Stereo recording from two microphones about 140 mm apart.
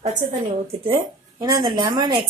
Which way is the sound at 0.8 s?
40° right (ahead or behind).